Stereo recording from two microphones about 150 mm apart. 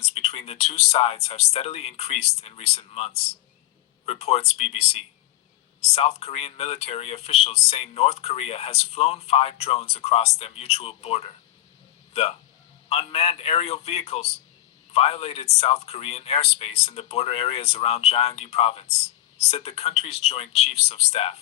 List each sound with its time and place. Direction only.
0.0 s speech: 40° left (ahead or behind)
12.9 s speech: 45° left (ahead or behind)